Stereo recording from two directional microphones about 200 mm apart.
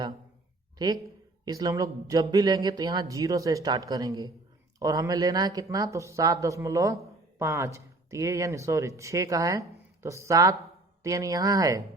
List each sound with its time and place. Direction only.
0.8 s speech: 20° right (ahead or behind)